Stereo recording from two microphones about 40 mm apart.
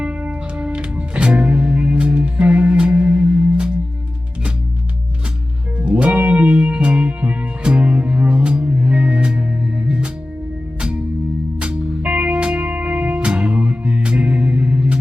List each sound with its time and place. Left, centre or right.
0.0 s music: right
5.8 s music: right
10.8 s music: right
12.0 s music: right
14.0 s music: right